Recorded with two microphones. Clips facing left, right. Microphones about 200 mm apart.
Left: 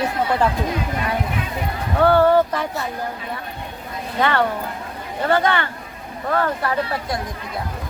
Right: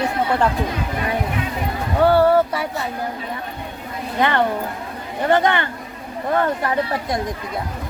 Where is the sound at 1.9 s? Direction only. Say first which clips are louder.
Even; 10° right (ahead or behind).